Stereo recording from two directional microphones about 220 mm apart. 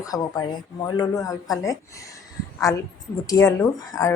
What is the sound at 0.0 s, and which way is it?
Speech, 15° left (ahead or behind).